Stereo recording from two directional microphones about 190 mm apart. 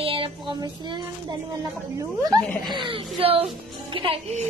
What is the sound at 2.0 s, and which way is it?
Speech, 20° right (ahead or behind).